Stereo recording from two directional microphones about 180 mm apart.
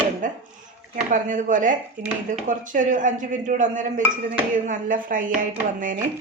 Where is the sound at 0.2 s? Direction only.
45° right (ahead or behind).